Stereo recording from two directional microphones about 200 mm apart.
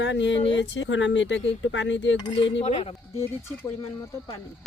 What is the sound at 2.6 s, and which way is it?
Speech, 30° left (ahead or behind).